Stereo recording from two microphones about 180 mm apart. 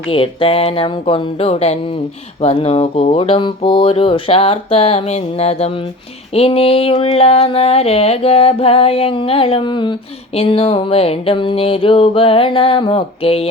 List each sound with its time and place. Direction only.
0.1 s speech: 30° left (ahead or behind)